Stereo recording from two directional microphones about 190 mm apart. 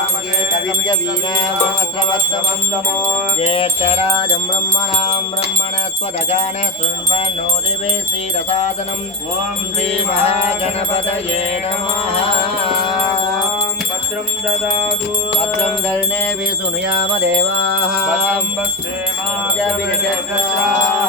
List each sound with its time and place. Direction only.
3.4 s music: 30° left (ahead or behind)
8.4 s music: 35° left (ahead or behind)
10.2 s music: 35° left (ahead or behind)
12.6 s music: 25° left (ahead or behind)